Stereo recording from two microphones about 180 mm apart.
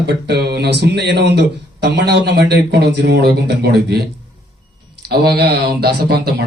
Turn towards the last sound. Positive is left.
turn(degrees=-60)  # may be behind; listen again after turning